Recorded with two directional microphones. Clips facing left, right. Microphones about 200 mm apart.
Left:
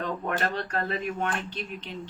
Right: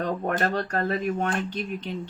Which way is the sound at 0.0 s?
45° right (ahead or behind).